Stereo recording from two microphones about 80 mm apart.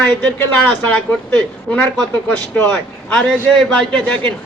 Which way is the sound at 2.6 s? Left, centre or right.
Centre.